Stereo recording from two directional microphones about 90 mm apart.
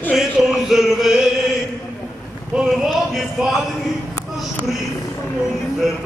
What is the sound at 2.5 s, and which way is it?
Speech, 5° right (ahead or behind).